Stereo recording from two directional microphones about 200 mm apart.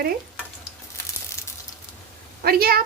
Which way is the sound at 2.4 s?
50° right (ahead or behind).